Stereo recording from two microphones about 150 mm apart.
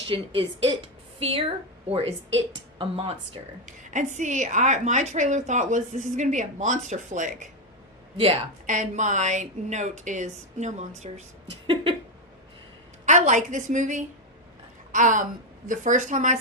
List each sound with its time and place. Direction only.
0.1 s speech: 35° right (ahead or behind)
3.7 s a woman's voice: 55° right (ahead or behind)
11.6 s a sound: 35° right (ahead or behind)
13.1 s a woman's voice: 55° right (ahead or behind)